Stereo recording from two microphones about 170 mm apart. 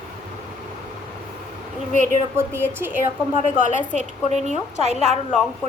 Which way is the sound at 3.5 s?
50° left (ahead or behind).